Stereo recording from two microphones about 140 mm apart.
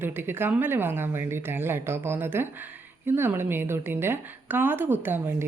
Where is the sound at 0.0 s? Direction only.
15° right (ahead or behind).